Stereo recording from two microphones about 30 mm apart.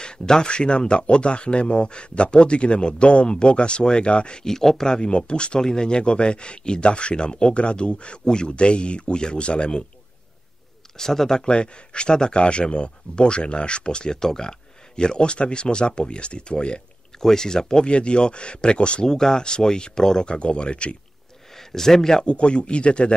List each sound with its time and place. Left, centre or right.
0.0 s speech: left
4.5 s speech: centre
5.0 s speech: left
5.6 s speech: left
11.0 s speech: centre
11.4 s speech: left
17.2 s speech: centre
17.8 s speech: left
19.0 s speech: centre
20.2 s speech: left
21.5 s speech: centre
22.2 s speech: left